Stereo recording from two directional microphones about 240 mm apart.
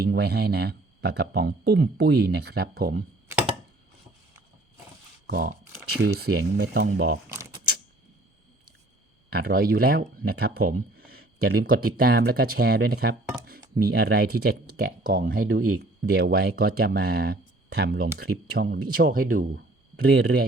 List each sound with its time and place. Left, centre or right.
0.0 s speech: right
5.2 s speech: right
7.3 s a sound: centre
9.3 s speech: right